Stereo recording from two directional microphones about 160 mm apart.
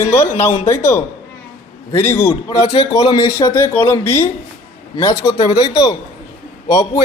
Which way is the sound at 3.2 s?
15° left (ahead or behind).